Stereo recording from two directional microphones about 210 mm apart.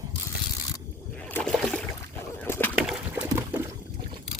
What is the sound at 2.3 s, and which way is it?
Bird, 10° left (ahead or behind).